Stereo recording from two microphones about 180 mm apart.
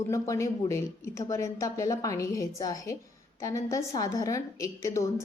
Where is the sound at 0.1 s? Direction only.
15° left (ahead or behind).